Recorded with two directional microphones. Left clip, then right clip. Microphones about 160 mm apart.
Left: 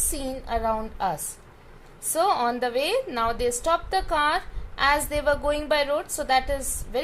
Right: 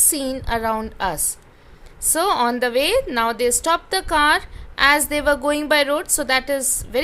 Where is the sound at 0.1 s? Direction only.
40° right (ahead or behind).